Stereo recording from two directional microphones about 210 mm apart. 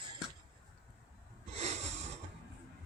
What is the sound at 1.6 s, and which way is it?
Snort, 30° right (ahead or behind).